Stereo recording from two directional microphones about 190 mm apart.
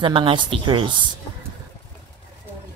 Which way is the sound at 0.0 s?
25° right (ahead or behind).